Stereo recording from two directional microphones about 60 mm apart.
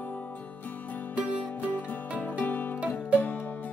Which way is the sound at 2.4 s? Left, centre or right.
Left.